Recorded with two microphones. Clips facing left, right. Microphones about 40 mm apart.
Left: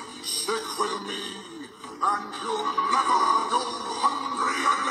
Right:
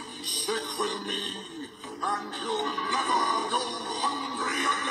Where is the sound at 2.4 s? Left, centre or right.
Centre.